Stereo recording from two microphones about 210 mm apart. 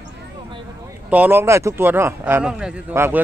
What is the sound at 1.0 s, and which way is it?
Speech, 10° right (ahead or behind).